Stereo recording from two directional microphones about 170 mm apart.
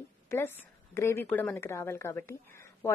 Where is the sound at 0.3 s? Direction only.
15° left (ahead or behind).